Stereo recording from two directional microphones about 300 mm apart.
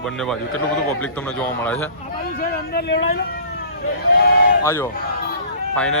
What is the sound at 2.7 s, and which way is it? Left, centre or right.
Speech, left.